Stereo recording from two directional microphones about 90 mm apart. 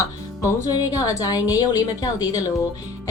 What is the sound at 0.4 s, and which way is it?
A woman's voice, 40° left (ahead or behind).